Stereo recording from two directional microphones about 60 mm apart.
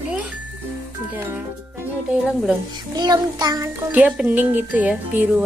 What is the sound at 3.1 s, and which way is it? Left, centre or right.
Child singing, right.